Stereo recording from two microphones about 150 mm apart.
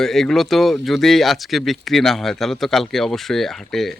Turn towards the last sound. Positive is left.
turn(degrees=0)  # may be behind; listen again after turning